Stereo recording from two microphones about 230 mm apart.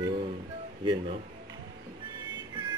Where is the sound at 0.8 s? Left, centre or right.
Centre.